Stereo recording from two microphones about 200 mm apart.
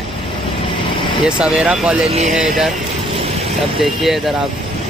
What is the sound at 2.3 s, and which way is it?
Speech, centre (ahead or behind).